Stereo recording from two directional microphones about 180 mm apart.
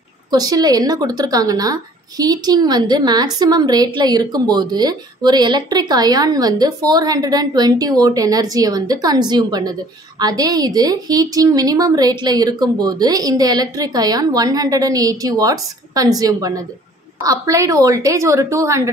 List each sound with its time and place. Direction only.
0.3 s a woman's voice: 20° right (ahead or behind)